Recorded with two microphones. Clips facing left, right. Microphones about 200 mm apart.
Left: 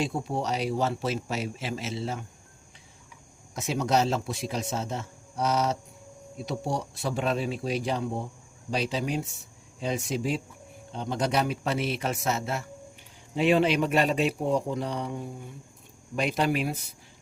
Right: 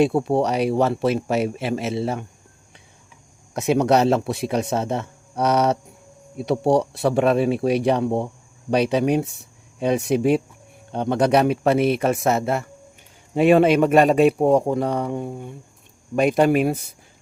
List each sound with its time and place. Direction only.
0.0 s speech: 65° right (ahead or behind)
3.5 s a man's voice: 65° right (ahead or behind)
16.1 s a man's voice: 50° right (ahead or behind)